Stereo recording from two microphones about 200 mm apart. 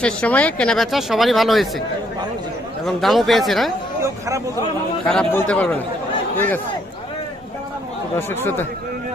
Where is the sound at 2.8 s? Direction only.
Centre (ahead or behind).